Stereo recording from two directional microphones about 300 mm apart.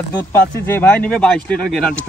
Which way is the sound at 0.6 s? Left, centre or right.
Centre.